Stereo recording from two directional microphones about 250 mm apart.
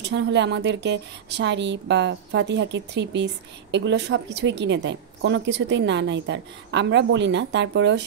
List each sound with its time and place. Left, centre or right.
0.0 s a woman's voice: right